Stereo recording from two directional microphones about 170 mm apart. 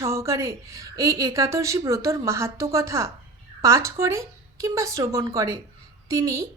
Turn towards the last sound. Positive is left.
turn(degrees=-20)  # may be behind; listen again after turning